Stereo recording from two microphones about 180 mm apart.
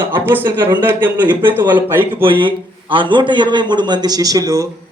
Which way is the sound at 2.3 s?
25° right (ahead or behind).